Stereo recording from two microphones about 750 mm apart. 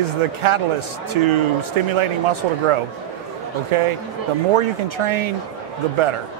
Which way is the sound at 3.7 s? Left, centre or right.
Right.